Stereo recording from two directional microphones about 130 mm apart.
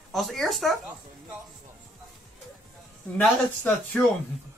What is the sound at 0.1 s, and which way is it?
Speech, centre (ahead or behind).